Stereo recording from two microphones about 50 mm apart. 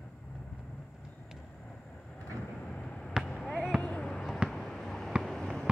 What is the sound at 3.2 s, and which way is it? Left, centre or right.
Fireworks, centre.